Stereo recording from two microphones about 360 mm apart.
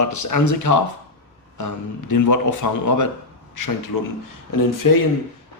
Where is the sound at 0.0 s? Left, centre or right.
Left.